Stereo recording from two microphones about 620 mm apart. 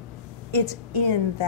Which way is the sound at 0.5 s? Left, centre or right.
Right.